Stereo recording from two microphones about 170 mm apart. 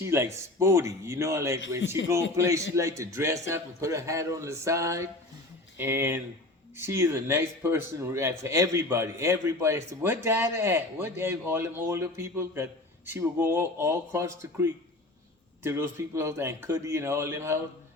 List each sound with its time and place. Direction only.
0.0 s speech: 15° right (ahead or behind)
2.0 s a man's voice: 90° left
2.3 s speech: 20° right (ahead or behind)